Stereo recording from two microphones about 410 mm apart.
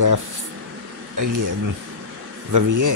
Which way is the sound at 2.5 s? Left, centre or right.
Right.